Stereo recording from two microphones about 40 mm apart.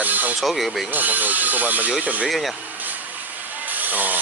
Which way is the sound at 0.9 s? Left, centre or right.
Right.